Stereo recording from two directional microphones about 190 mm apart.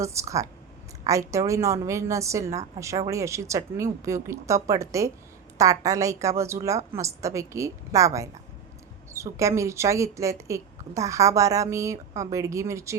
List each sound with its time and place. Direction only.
0.0 s speech: 15° right (ahead or behind)